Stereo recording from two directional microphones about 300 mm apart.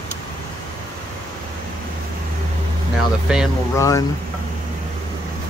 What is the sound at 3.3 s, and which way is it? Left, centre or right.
Speech, centre.